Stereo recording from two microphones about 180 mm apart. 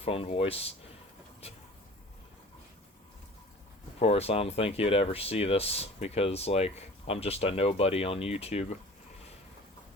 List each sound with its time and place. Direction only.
0.0 s speech: 35° left (ahead or behind)
4.0 s speech: 35° left (ahead or behind)